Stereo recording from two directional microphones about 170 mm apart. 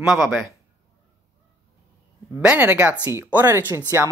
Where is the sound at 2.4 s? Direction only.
10° right (ahead or behind).